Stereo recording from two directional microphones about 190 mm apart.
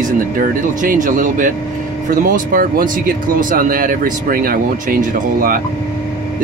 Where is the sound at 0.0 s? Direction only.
45° right (ahead or behind).